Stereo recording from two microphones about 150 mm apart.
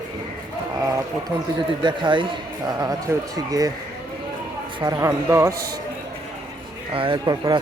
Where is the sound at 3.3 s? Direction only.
25° right (ahead or behind).